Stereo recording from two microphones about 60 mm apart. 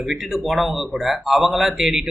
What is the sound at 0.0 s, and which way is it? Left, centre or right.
Speech, centre.